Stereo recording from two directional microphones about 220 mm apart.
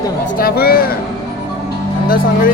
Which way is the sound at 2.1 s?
40° left (ahead or behind).